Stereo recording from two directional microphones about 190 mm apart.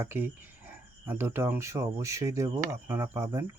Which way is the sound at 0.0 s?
10° right (ahead or behind).